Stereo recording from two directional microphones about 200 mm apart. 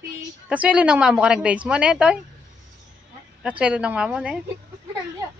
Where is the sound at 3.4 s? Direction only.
5° right (ahead or behind).